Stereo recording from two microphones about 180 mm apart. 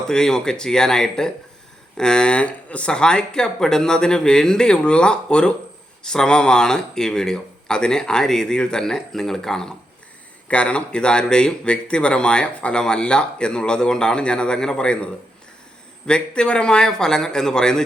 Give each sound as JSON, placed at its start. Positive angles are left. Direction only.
{"t": 0.1, "sound": "speech", "side_deg": 5}